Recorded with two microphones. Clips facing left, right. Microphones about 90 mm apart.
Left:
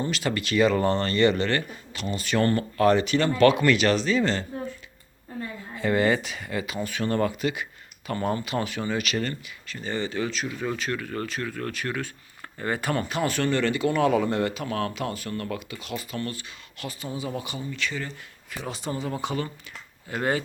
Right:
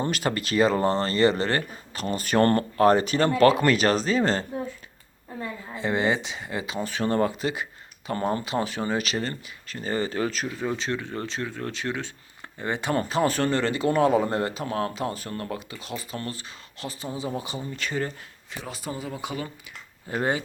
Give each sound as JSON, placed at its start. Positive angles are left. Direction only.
{"t": 0.0, "sound": "speech", "side_deg": -45}
{"t": 2.7, "sound": "speech", "side_deg": -40}
{"t": 5.7, "sound": "speech", "side_deg": -25}
{"t": 10.6, "sound": "speech", "side_deg": -25}
{"t": 13.0, "sound": "speech", "side_deg": -35}
{"t": 18.6, "sound": "speech", "side_deg": -5}
{"t": 20.1, "sound": "speech", "side_deg": -20}